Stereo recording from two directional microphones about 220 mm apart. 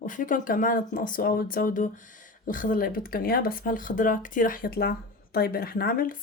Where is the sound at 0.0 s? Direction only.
35° left (ahead or behind).